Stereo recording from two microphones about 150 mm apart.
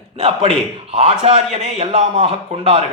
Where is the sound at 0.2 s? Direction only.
40° right (ahead or behind).